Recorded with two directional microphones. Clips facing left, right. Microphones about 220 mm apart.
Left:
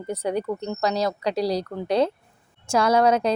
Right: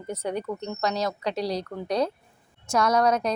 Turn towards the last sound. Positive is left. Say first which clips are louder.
# left 3 dB
turn(degrees=30)  # may be behind; listen again after turning